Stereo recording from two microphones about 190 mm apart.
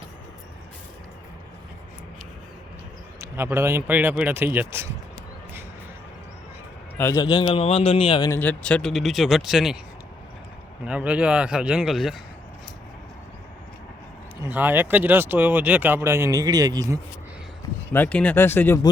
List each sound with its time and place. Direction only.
3.2 s speech: 10° right (ahead or behind)
6.9 s a man's voice: 15° left (ahead or behind)
8.3 s speech: 10° left (ahead or behind)
10.8 s speech: 5° right (ahead or behind)
14.4 s speech: 10° right (ahead or behind)
17.9 s speech: 10° left (ahead or behind)